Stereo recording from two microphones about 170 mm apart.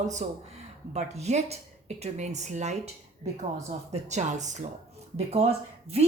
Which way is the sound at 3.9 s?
45° right (ahead or behind).